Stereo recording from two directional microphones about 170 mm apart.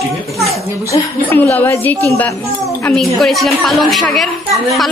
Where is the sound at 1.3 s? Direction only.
10° left (ahead or behind).